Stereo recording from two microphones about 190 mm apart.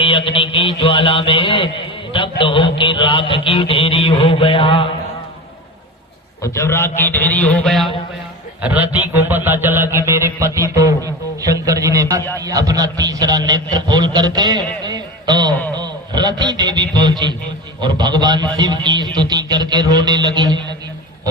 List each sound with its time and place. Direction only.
0.0 s a sound: 25° left (ahead or behind)
6.4 s a man's voice: 15° left (ahead or behind)
8.6 s mantra: 10° right (ahead or behind)
12.4 s a man's voice: 20° right (ahead or behind)